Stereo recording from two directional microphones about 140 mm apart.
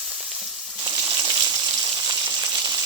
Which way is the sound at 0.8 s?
30° right (ahead or behind).